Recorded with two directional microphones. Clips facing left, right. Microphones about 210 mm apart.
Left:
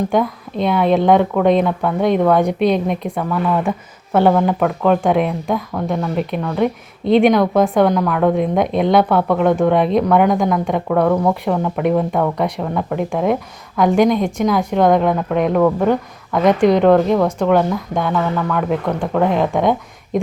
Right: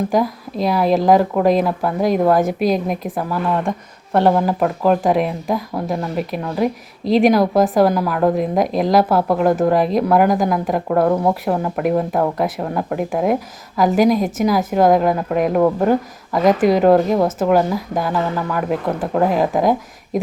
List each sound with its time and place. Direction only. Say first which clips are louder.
0.1 s a woman's voice: even; centre (ahead or behind)